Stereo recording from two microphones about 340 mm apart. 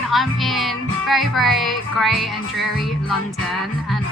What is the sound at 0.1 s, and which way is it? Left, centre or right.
Music, centre.